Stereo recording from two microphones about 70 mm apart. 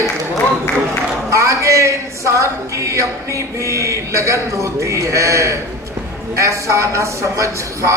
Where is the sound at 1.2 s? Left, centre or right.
Right.